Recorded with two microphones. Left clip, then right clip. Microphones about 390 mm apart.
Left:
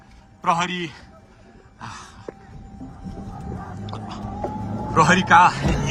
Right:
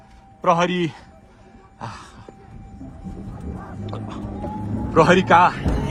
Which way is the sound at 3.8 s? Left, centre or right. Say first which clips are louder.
Right 1 dB; centre.